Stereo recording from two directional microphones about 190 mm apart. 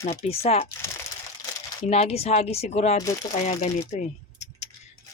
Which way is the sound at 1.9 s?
30° left (ahead or behind).